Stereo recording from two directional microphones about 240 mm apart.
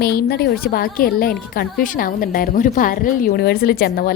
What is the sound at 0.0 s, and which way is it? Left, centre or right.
A woman's voice, left.